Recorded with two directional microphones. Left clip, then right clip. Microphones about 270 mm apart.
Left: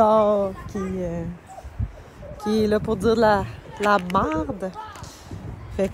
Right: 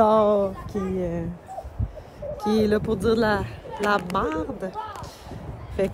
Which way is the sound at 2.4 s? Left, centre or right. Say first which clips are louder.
Left 1 dB; centre.